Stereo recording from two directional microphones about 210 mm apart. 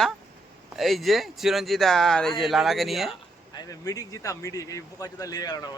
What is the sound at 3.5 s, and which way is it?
Speech, 20° left (ahead or behind).